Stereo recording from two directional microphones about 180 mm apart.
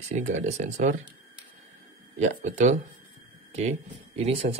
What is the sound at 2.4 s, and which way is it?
Speech, 40° right (ahead or behind).